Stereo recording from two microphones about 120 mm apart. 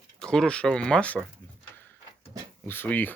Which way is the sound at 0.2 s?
5° left (ahead or behind).